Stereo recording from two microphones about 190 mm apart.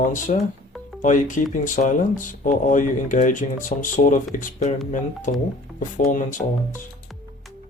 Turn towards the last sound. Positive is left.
turn(degrees=45)  # may be behind; listen again after turning